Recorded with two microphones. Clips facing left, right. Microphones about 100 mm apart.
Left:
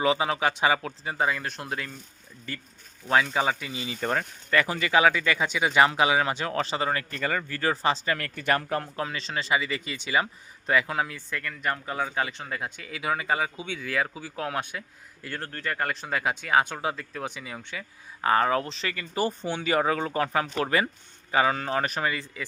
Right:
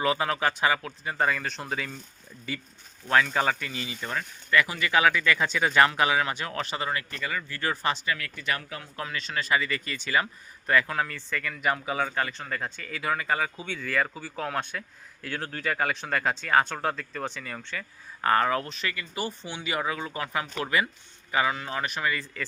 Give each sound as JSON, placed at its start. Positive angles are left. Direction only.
{"t": 0.0, "sound": "speech", "side_deg": 20}
{"t": 1.2, "sound": "speech", "side_deg": 5}
{"t": 3.1, "sound": "speech", "side_deg": 15}
{"t": 4.0, "sound": "speech", "side_deg": 45}
{"t": 4.5, "sound": "speech", "side_deg": 35}
{"t": 5.4, "sound": "speech", "side_deg": 15}
{"t": 7.2, "sound": "speech", "side_deg": 45}
{"t": 8.0, "sound": "speech", "side_deg": 50}
{"t": 9.0, "sound": "speech", "side_deg": 30}
{"t": 11.6, "sound": "speech", "side_deg": -10}
{"t": 12.1, "sound": "speech", "side_deg": 20}
{"t": 22.1, "sound": "speech", "side_deg": 20}